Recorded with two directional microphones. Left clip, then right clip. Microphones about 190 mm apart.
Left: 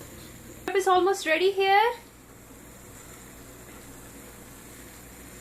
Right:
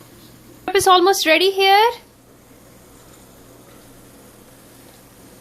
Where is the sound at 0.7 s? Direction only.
45° right (ahead or behind).